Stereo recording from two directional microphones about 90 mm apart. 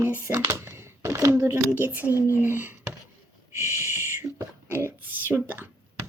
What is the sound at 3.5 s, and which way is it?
Speech, 35° right (ahead or behind).